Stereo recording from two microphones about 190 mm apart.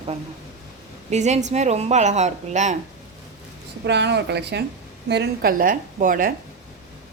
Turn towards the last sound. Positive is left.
turn(degrees=-45)  # may be behind; listen again after turning